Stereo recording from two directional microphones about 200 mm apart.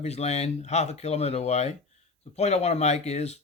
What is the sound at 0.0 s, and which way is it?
Speech, 35° left (ahead or behind).